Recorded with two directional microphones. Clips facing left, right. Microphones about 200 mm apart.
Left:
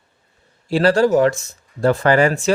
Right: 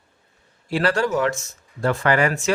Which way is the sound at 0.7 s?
30° left (ahead or behind).